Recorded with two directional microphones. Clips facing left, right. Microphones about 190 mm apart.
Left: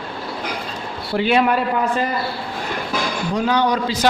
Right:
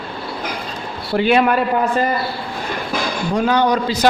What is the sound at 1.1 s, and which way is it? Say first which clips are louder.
Speech: right 2 dB; 55° right (ahead or behind).